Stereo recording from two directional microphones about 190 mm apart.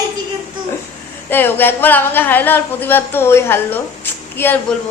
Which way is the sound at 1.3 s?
10° left (ahead or behind).